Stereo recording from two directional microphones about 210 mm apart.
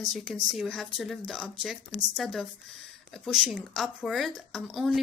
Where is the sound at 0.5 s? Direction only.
Centre (ahead or behind).